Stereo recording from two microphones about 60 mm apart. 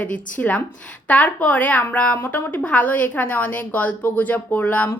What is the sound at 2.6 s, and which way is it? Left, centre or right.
Speech, left.